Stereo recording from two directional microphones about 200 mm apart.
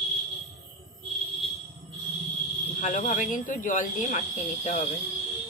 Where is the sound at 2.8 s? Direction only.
35° left (ahead or behind).